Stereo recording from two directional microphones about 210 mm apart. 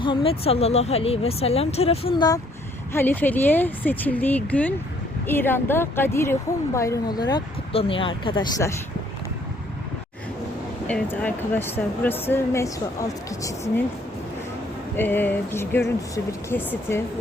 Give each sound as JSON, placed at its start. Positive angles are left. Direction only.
{"t": 0.0, "sound": "speech", "side_deg": 25}
{"t": 10.8, "sound": "speech", "side_deg": 5}
{"t": 14.9, "sound": "speech", "side_deg": 10}